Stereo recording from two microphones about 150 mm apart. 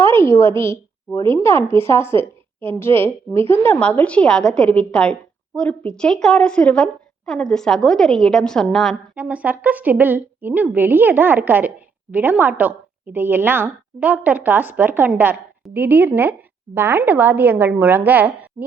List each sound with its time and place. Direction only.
0.0 s a woman's voice: 15° left (ahead or behind); by 9.0 s centre (ahead or behind)
9.1 s a woman's voice: 10° right (ahead or behind)